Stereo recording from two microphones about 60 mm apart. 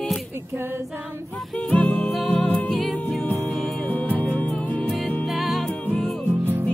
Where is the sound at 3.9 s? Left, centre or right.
Left.